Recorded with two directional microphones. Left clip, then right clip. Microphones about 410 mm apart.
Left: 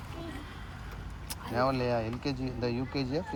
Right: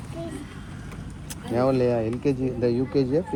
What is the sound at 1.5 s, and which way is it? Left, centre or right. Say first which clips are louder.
Speech: right 7 dB; centre.